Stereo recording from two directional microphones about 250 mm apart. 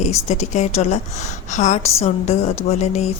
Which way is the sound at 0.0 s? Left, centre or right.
Left.